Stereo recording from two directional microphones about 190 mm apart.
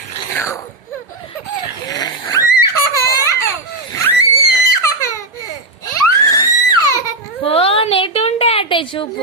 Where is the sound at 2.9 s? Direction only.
15° left (ahead or behind).